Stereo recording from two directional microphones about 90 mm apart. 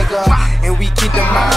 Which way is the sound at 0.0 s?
Centre (ahead or behind).